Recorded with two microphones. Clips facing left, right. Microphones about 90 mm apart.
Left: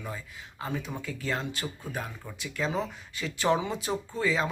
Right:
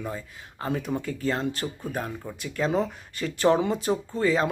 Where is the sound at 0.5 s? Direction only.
45° right (ahead or behind).